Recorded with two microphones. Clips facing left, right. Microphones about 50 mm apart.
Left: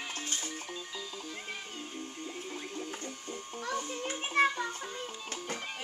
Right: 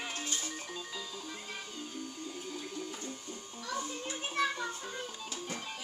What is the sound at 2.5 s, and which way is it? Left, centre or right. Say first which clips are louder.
Printer: even; left.